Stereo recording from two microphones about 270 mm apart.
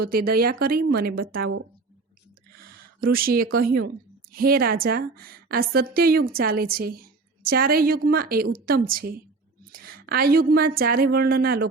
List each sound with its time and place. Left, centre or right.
0.0 s a woman's voice: right
3.0 s a woman's voice: right